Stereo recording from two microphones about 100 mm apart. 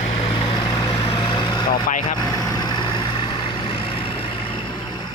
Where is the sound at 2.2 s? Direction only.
40° left (ahead or behind); by 4.3 s 65° left (ahead or behind).